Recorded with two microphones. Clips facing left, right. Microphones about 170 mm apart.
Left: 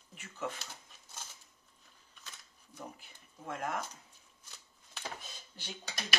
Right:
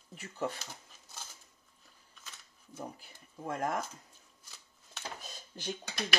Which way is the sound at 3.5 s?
40° right (ahead or behind).